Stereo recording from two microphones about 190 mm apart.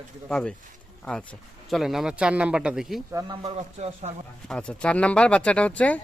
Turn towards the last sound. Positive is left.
turn(degrees=5)  # may be behind; listen again after turning